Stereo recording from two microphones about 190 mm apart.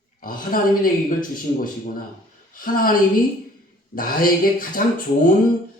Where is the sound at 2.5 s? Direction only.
50° left (ahead or behind).